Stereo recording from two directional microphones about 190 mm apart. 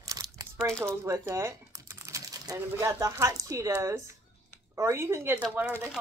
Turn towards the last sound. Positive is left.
turn(degrees=-10)  # may be behind; listen again after turning